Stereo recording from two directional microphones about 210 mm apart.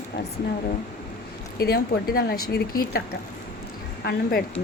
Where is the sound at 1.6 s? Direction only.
45° left (ahead or behind).